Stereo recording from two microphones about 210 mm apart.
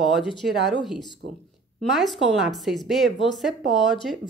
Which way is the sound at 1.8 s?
Centre (ahead or behind).